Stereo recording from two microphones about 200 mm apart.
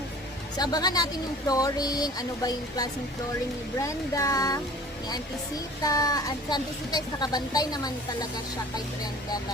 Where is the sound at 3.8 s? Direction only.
15° left (ahead or behind).